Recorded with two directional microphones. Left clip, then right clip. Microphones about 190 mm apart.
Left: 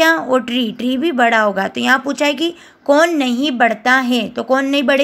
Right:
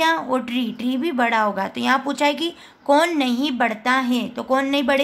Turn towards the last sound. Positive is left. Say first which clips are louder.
# left 5 dB
turn(degrees=20)  # may be behind; listen again after turning